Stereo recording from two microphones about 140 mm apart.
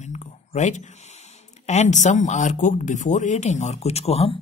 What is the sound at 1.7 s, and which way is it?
Speech, 55° left (ahead or behind).